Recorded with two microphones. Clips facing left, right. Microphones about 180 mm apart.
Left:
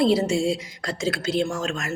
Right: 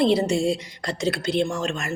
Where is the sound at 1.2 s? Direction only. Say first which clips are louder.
Even; 65° right (ahead or behind).